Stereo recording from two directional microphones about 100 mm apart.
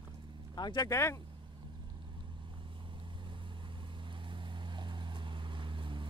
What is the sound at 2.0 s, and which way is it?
Vehicle, 50° right (ahead or behind).